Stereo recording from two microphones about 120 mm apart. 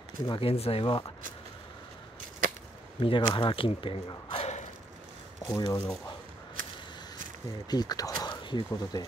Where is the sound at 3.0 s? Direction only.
45° left (ahead or behind).